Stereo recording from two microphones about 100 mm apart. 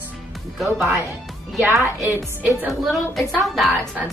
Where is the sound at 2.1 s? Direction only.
20° right (ahead or behind).